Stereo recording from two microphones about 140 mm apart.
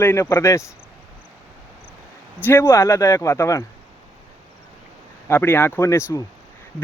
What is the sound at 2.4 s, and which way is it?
Speech, 15° left (ahead or behind).